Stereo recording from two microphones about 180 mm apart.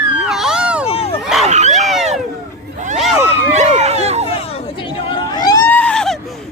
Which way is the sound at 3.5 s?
40° right (ahead or behind).